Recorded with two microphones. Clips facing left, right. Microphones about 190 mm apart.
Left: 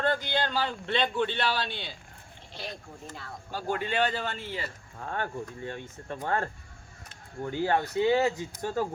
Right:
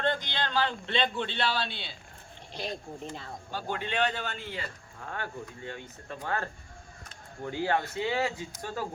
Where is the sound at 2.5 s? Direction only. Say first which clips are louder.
Right 4 dB; 20° right (ahead or behind).